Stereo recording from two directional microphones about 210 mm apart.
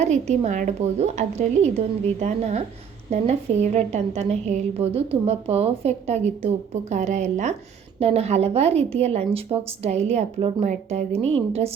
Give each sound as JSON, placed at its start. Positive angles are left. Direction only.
{"t": 0.0, "sound": "a woman's voice", "side_deg": -30}